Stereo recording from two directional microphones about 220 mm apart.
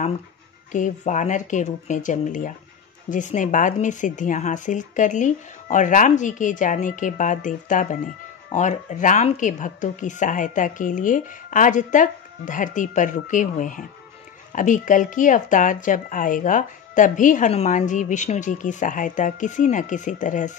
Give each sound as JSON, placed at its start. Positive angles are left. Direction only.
{"t": 0.7, "sound": "speech", "side_deg": 35}